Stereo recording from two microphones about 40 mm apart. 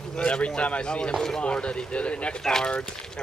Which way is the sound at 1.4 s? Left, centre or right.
Left.